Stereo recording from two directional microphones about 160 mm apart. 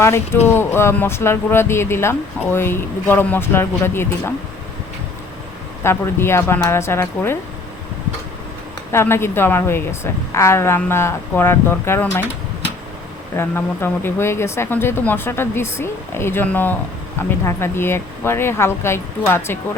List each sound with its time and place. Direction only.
0.0 s speech: 15° left (ahead or behind)
5.8 s speech: 15° left (ahead or behind)
8.9 s speech: 15° left (ahead or behind)
13.3 s speech: 15° left (ahead or behind)